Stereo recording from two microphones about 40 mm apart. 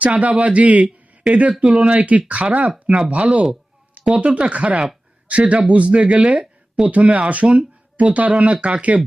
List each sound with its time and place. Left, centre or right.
0.0 s a man's voice: right